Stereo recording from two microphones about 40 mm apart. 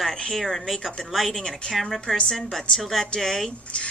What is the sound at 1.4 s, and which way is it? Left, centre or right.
Speech, centre.